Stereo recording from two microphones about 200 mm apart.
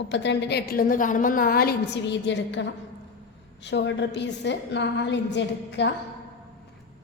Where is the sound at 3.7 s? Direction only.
60° left (ahead or behind).